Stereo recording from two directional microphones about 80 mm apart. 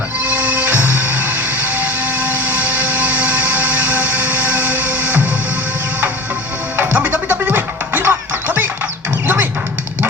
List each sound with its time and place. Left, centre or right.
0.2 s music: right
2.1 s a sound: right
6.7 s music: right